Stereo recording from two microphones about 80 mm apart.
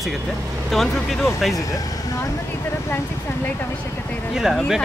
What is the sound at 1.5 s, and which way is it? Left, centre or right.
Speech, left.